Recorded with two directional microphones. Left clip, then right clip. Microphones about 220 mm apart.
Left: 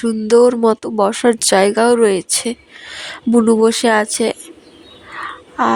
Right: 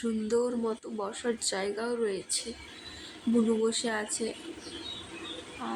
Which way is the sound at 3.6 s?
45° left (ahead or behind).